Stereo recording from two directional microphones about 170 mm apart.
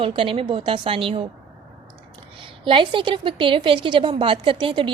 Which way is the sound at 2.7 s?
30° right (ahead or behind).